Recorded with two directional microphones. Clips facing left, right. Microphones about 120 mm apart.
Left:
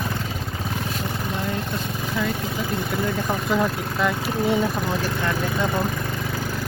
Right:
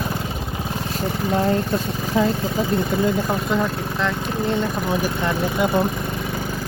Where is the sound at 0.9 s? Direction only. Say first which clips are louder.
Right 6 dB; 35° right (ahead or behind).